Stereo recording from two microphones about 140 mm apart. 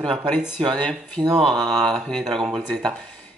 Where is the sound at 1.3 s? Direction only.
40° right (ahead or behind).